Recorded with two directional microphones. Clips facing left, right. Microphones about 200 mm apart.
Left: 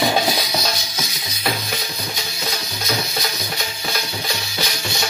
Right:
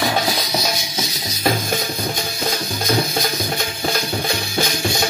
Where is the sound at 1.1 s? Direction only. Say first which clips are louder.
Right 5 dB; 45° right (ahead or behind).